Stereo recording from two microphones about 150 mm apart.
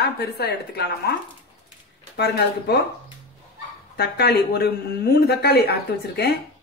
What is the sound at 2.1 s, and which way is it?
Speech, 90° left.